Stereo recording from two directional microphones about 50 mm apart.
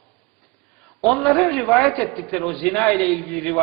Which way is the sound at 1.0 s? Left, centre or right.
Centre.